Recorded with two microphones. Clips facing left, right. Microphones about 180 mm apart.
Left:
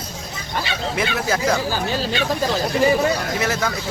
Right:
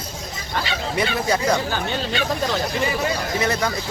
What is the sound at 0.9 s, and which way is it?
Speech, centre (ahead or behind).